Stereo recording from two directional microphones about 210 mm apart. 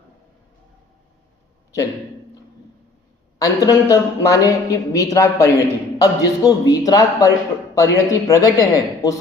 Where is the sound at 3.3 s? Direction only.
15° left (ahead or behind).